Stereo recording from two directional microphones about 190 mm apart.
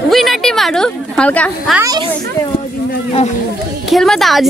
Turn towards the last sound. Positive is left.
turn(degrees=0)  # may be behind; listen again after turning